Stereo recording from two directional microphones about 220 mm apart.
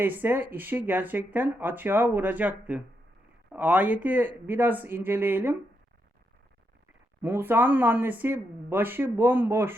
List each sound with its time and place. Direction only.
0.0 s speech: 10° right (ahead or behind)
7.2 s speech: 10° right (ahead or behind)